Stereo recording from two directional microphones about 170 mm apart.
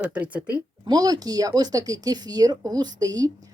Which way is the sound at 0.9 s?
20° right (ahead or behind).